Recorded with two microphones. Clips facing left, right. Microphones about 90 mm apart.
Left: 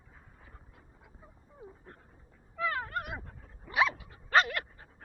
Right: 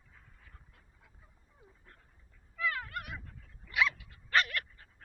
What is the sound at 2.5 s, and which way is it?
Dog, 35° left (ahead or behind).